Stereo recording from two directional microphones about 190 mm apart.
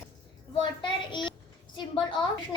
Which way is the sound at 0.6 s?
25° left (ahead or behind).